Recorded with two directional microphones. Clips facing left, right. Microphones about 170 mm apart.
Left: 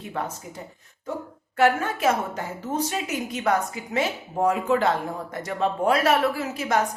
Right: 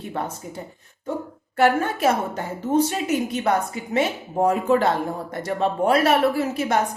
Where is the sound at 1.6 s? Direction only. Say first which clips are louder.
Right 2 dB; 35° right (ahead or behind).